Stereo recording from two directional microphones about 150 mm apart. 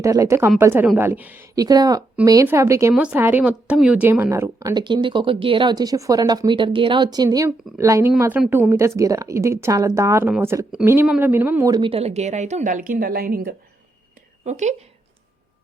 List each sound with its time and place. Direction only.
0.0 s speech: 20° right (ahead or behind)
1.5 s speech: 25° right (ahead or behind)
2.9 s speech: 10° right (ahead or behind)
4.7 s speech: 30° right (ahead or behind)
8.4 s speech: 10° right (ahead or behind)
11.7 s a woman's voice: 35° right (ahead or behind); by 13.6 s 80° right
14.4 s a woman's voice: 50° right (ahead or behind)